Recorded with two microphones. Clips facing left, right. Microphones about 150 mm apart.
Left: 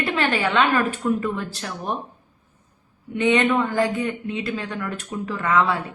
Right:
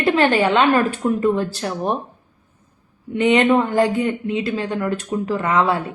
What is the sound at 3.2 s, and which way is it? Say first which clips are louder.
A woman's voice: right 4 dB; 25° right (ahead or behind).